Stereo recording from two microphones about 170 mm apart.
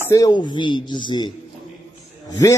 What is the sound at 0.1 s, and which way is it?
A man's voice, 25° left (ahead or behind).